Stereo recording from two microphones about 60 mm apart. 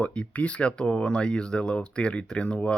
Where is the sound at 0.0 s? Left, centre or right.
Left.